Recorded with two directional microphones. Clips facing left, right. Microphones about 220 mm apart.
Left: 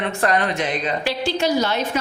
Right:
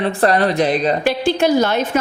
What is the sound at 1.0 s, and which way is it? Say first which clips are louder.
Speech: right 4 dB; 50° right (ahead or behind).